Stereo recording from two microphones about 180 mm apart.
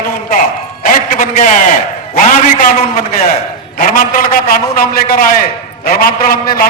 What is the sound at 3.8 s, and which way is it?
A man's voice, 50° left (ahead or behind).